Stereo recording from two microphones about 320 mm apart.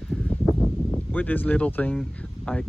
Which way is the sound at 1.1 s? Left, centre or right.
Centre.